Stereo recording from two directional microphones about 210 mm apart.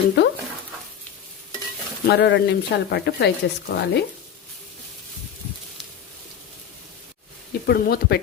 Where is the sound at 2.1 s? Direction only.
55° left (ahead or behind).